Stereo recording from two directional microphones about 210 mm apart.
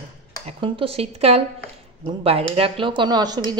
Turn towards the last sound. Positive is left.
turn(degrees=-20)  # may be behind; listen again after turning